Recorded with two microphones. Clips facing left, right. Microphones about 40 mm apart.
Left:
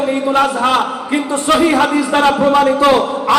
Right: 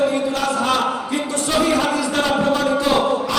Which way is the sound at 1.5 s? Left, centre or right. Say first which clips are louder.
Left 4 dB; left.